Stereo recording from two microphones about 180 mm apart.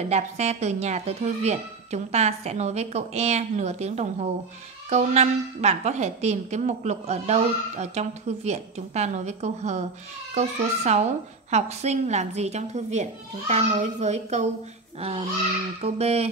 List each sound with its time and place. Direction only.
0.1 s a woman's voice: 40° right (ahead or behind)